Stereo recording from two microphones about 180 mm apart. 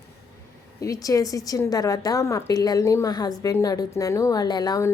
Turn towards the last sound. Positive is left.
turn(degrees=20)  # may be behind; listen again after turning